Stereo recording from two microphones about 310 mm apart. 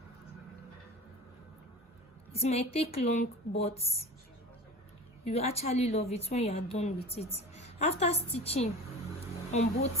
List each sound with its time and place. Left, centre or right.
2.3 s a woman's voice: centre
5.2 s a woman's voice: centre